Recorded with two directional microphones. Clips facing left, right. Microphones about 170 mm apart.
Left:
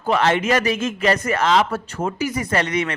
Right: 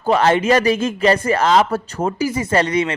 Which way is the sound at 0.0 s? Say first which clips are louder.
Right 3 dB; 35° right (ahead or behind).